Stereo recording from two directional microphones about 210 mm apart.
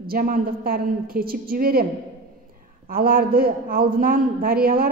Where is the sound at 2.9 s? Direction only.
45° right (ahead or behind).